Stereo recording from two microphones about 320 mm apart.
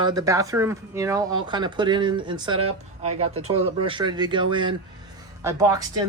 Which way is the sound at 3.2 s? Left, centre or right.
Centre.